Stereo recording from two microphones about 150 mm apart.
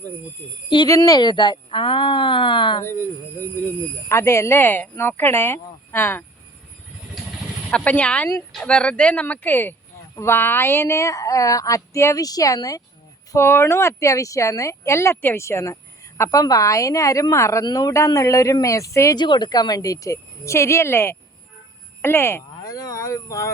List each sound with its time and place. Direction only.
0.9 s speech: 25° left (ahead or behind)
2.8 s speech: 20° left (ahead or behind)
4.1 s speech: 15° left (ahead or behind)
7.7 s speech: 10° left (ahead or behind)